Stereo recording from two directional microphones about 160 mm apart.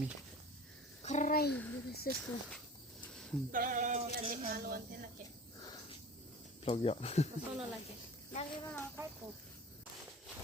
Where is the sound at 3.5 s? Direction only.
60° right (ahead or behind).